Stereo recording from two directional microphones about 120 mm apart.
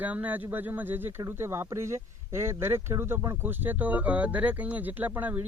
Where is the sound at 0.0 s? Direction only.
10° right (ahead or behind).